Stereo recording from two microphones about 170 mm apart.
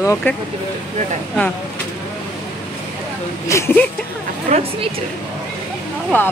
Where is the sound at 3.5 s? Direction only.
15° left (ahead or behind).